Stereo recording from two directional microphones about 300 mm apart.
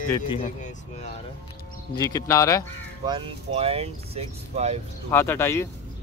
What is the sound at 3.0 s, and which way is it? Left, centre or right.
Speech, centre.